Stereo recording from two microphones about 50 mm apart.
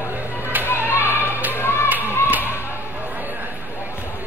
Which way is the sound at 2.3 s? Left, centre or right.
Right.